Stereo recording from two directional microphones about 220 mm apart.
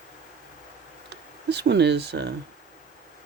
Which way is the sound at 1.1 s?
50° right (ahead or behind).